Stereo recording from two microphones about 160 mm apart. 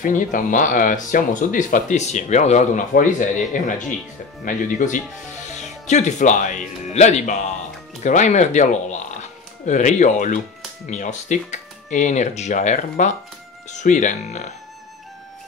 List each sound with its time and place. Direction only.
0.0 s speech: 55° left (ahead or behind)